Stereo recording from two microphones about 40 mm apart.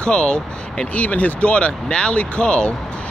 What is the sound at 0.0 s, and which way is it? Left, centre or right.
Speech, left.